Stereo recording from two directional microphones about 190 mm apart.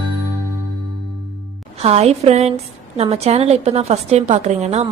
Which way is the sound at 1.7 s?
35° right (ahead or behind).